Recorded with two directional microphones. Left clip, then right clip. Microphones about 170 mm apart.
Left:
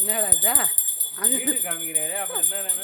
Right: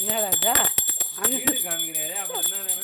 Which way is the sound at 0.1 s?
20° right (ahead or behind).